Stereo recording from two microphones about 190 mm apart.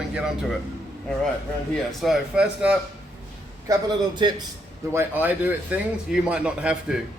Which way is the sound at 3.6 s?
20° right (ahead or behind).